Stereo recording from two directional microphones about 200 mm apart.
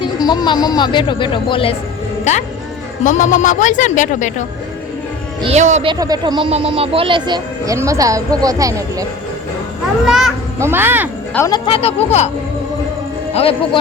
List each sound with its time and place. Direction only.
0.0 s speech: 20° left (ahead or behind)
3.0 s a man's voice: 40° left (ahead or behind)
5.4 s speech: 35° right (ahead or behind)
5.9 s speech: 20° right (ahead or behind)
10.1 s a child's voice: centre (ahead or behind)
11.3 s speech: 20° left (ahead or behind)
13.3 s speech: 30° left (ahead or behind)